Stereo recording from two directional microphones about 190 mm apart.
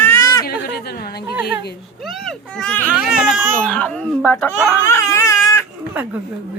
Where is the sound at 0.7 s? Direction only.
55° left (ahead or behind).